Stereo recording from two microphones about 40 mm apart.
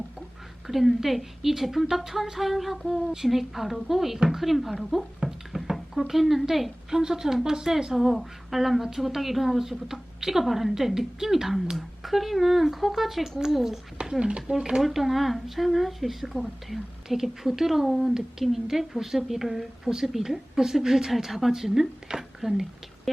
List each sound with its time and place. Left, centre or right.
0.7 s a woman's voice: centre
14.0 s speech: right
14.8 s a woman's voice: centre
23.1 s a sound: centre